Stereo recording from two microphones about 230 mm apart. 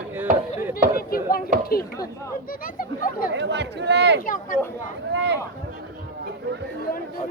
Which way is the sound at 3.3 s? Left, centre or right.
Right.